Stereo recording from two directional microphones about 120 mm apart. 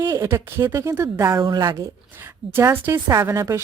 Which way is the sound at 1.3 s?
35° right (ahead or behind).